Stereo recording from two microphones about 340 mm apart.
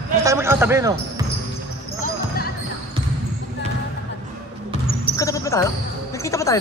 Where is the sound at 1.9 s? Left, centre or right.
Left.